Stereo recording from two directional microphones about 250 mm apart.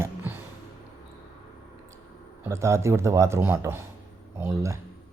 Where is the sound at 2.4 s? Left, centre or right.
Centre.